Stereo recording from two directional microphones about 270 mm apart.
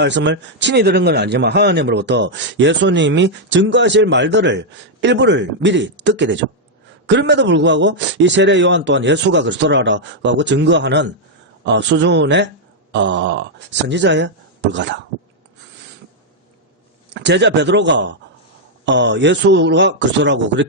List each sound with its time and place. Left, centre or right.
0.0 s a man's voice: right
17.2 s a man's voice: right